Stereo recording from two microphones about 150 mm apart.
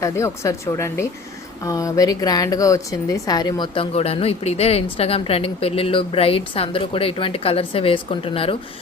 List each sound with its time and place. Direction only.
0.0 s a woman's voice: 20° left (ahead or behind)
3.9 s speech: 40° left (ahead or behind)